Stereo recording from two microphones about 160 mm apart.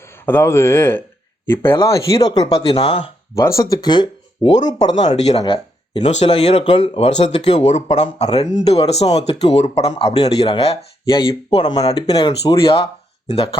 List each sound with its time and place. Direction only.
0.3 s speech: 15° left (ahead or behind)
4.9 s speech: 45° left (ahead or behind)
11.5 s speech: 25° left (ahead or behind)
12.5 s speech: 35° left (ahead or behind)